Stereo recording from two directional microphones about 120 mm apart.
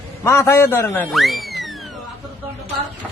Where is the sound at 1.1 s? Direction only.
Centre (ahead or behind).